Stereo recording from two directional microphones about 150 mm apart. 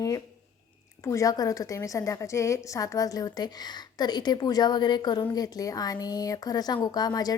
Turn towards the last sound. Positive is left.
turn(degrees=25)  # may be behind; listen again after turning